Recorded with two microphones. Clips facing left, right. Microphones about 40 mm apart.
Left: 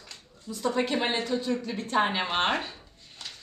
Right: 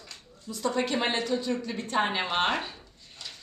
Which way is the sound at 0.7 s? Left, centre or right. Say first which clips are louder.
Even; centre.